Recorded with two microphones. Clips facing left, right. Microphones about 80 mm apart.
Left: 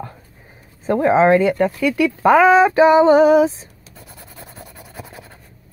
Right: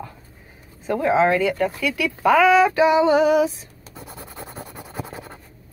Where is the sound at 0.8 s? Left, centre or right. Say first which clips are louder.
Left 4 dB; left.